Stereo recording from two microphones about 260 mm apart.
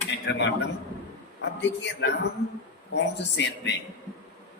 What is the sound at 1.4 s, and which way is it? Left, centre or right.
A man's voice, left.